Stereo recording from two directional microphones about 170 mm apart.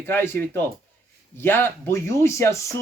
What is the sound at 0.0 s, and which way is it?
Speech, 10° left (ahead or behind).